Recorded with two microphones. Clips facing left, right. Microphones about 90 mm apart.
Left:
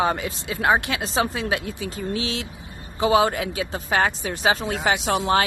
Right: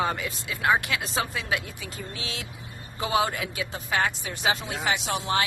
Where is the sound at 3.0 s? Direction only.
30° left (ahead or behind).